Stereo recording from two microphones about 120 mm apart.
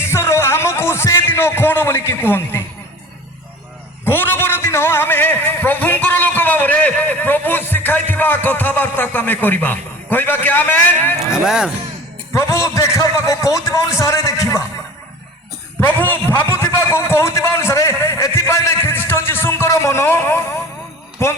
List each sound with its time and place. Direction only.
0.0 s a sound: 20° left (ahead or behind)
4.0 s a man's voice: 20° left (ahead or behind)
11.4 s speech: 5° right (ahead or behind)
12.3 s a man's voice: 25° left (ahead or behind)
15.8 s a man's voice: 15° left (ahead or behind)